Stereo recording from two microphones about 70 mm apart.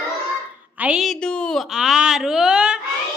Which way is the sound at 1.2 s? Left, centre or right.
Centre.